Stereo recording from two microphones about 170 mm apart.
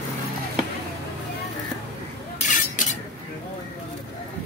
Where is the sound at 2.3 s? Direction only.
45° left (ahead or behind).